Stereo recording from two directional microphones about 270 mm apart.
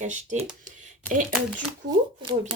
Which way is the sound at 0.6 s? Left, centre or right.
Right.